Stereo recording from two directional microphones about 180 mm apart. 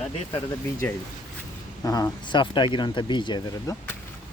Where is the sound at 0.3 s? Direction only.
10° left (ahead or behind).